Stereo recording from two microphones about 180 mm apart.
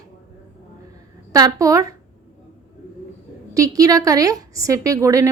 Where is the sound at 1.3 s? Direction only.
20° right (ahead or behind).